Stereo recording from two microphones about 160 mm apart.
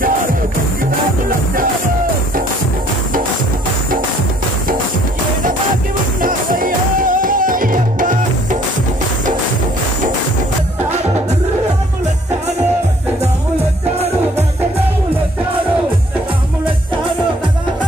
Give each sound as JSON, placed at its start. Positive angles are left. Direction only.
{"t": 6.2, "sound": "music", "side_deg": -60}